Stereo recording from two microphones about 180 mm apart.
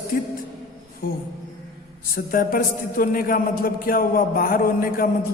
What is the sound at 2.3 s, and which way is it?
A man's voice, 50° left (ahead or behind).